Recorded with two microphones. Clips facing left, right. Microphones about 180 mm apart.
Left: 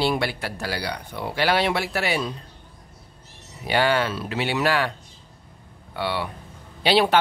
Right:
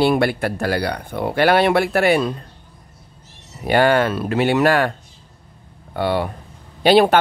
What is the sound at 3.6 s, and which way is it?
Speech, 50° right (ahead or behind).